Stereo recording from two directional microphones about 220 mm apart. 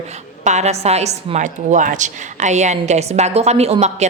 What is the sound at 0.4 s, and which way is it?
A woman's voice, 30° right (ahead or behind).